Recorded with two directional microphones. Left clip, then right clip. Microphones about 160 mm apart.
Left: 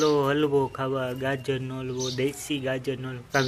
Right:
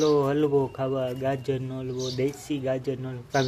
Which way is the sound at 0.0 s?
Centre (ahead or behind).